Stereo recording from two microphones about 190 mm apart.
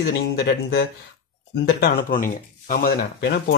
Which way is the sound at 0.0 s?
55° left (ahead or behind).